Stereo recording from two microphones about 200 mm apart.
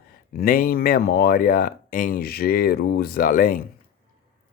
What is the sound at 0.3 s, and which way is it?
Speech, 45° left (ahead or behind).